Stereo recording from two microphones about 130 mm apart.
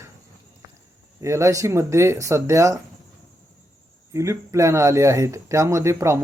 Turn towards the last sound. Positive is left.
turn(degrees=-20)  # may be behind; listen again after turning